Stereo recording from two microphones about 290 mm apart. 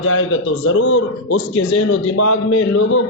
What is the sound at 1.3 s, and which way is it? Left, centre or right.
A man's voice, left.